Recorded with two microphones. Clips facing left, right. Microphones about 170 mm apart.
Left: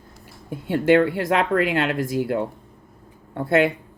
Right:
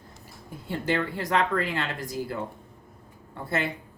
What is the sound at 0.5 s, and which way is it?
Speech, 65° left (ahead or behind).